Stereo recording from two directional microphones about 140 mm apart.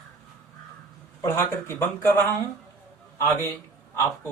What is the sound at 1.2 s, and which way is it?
Speech, 20° left (ahead or behind).